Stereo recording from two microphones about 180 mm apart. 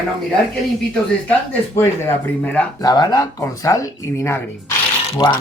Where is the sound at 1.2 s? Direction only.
10° left (ahead or behind).